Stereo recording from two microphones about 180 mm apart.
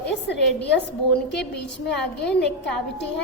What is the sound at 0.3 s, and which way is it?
Speech, 70° left (ahead or behind).